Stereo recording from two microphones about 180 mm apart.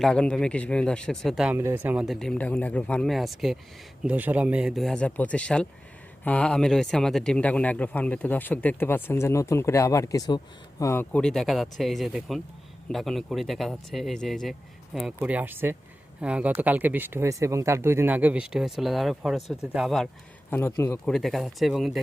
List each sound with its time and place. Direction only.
0.0 s speech: 5° left (ahead or behind)
1.5 s a man's voice: 10° right (ahead or behind)
20.5 s speech: 15° left (ahead or behind)